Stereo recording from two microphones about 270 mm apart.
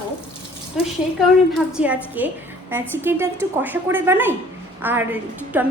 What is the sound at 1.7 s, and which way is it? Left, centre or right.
A woman's voice, centre.